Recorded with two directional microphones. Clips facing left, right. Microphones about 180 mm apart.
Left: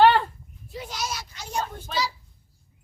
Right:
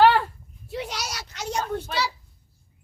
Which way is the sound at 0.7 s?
75° right (ahead or behind).